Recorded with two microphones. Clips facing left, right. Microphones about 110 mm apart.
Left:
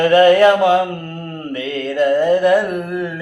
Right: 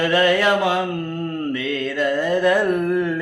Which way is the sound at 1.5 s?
25° left (ahead or behind).